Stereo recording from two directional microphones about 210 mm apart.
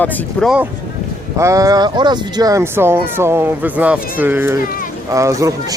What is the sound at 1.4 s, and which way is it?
Speech, 15° right (ahead or behind).